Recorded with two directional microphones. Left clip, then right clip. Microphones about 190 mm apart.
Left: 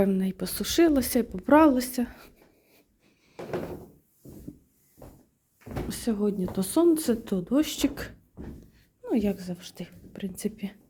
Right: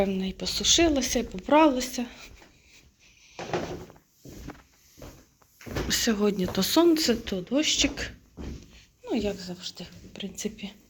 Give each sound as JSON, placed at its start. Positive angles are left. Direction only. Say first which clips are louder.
{"t": 0.0, "sound": "speech", "louder": "left 1 dB", "side_deg": 40}
{"t": 5.9, "sound": "speech", "louder": "right 4 dB", "side_deg": 15}
{"t": 7.3, "sound": "speech", "louder": "right 1 dB", "side_deg": 40}